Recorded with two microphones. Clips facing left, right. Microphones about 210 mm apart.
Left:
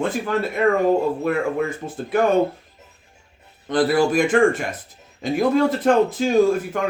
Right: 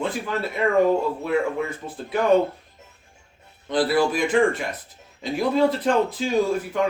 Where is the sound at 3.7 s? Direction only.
45° left (ahead or behind).